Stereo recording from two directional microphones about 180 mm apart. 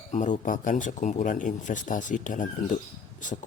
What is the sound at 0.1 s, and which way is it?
A man's voice, 45° left (ahead or behind).